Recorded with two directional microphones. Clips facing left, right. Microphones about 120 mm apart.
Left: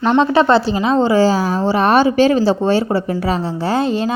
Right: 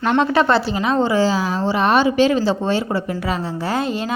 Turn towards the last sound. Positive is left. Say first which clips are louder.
# left 4 dB
turn(degrees=30)  # may be behind; listen again after turning